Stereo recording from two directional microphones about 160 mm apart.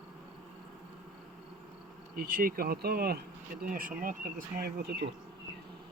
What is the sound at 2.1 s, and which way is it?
Speech, 60° right (ahead or behind).